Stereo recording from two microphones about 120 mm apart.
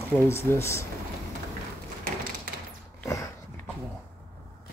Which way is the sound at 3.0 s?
25° left (ahead or behind).